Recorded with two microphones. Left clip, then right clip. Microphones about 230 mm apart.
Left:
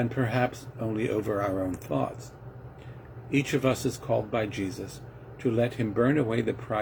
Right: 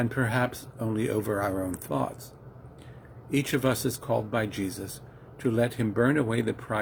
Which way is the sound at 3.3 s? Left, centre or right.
Right.